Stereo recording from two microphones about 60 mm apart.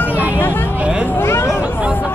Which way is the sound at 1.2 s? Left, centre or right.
Left.